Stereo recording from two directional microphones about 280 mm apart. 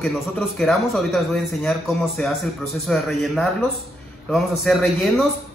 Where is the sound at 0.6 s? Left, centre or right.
Centre.